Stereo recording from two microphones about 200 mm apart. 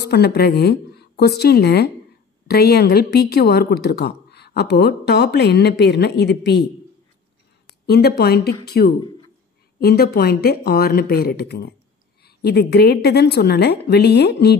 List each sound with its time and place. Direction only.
0.0 s a woman's voice: 55° left (ahead or behind)
7.6 s a woman's voice: 50° left (ahead or behind)